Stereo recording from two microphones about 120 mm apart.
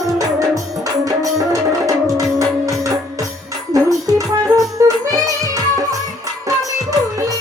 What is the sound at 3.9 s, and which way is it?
Music, 30° right (ahead or behind).